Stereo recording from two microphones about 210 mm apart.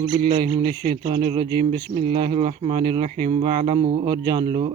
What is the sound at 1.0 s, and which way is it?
Speech, 25° right (ahead or behind).